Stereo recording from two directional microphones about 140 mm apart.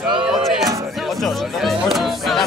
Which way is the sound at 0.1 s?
5° right (ahead or behind).